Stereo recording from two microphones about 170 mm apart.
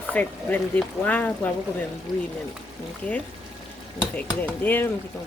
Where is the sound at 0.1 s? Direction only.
10° left (ahead or behind).